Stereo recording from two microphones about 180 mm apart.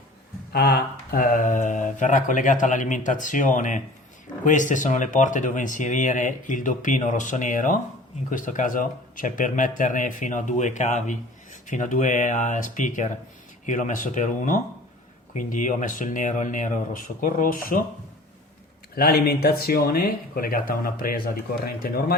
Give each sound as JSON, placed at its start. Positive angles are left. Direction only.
{"t": 0.5, "sound": "speech", "side_deg": 55}
{"t": 18.9, "sound": "speech", "side_deg": 55}